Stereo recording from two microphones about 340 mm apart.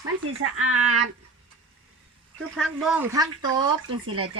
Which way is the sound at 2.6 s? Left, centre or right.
Centre.